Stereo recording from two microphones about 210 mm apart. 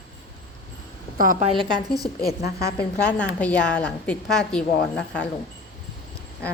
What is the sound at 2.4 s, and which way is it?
Speech, 50° left (ahead or behind).